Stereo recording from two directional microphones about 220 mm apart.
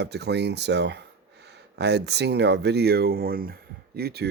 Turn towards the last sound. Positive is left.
turn(degrees=-45)  # may be behind; listen again after turning